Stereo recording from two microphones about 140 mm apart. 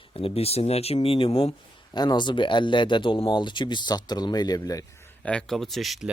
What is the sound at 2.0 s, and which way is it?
Speech, 30° left (ahead or behind).